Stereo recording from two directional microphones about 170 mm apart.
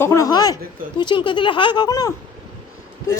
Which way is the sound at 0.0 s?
15° left (ahead or behind).